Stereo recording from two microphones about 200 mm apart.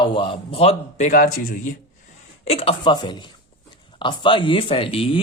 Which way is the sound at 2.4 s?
30° left (ahead or behind).